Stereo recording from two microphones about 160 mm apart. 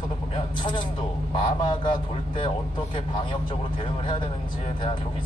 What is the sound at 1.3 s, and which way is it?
Speech, 30° left (ahead or behind).